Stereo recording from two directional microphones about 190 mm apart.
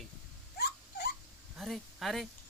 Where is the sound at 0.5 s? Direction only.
55° left (ahead or behind).